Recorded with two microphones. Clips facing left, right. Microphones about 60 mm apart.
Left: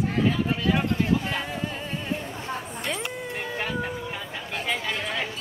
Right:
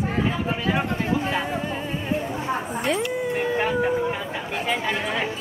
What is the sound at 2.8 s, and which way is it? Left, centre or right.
Dog, centre.